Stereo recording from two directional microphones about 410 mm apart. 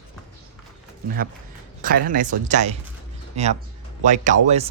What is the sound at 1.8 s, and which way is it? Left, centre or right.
Speech, right.